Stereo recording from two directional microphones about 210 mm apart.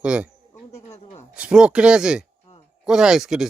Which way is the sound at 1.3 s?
5° right (ahead or behind).